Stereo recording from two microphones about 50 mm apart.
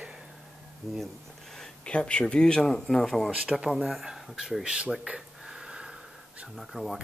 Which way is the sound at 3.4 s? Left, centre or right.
Centre.